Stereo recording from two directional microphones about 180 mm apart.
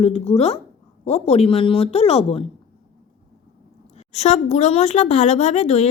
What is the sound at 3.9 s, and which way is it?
A woman's voice, 35° left (ahead or behind).